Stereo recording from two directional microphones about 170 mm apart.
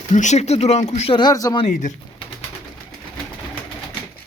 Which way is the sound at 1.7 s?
45° left (ahead or behind).